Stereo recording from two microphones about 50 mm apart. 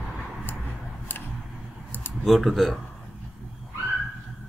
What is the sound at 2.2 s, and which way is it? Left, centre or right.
Speech, centre.